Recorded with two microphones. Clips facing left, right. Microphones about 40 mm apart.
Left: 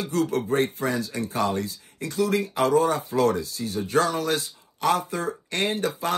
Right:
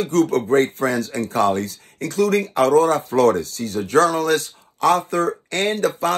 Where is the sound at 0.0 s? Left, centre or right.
Right.